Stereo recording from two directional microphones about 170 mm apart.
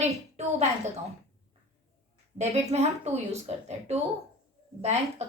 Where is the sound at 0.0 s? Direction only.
40° right (ahead or behind).